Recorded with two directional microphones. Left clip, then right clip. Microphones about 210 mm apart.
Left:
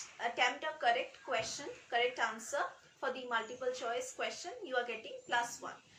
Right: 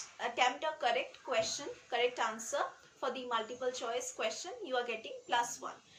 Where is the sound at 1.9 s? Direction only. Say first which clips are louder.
Even; 15° right (ahead or behind).